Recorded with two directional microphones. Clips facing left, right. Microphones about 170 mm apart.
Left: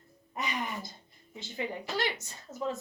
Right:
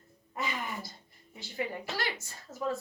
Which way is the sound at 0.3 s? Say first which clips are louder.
Left 1 dB; 20° left (ahead or behind).